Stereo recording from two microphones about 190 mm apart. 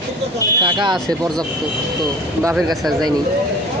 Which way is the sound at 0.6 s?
25° right (ahead or behind).